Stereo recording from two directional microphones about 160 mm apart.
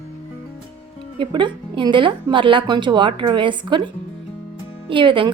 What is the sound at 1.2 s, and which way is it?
A woman's voice, 30° right (ahead or behind).